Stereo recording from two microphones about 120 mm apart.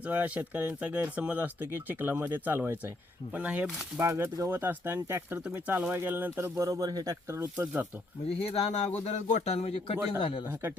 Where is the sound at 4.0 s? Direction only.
25° right (ahead or behind).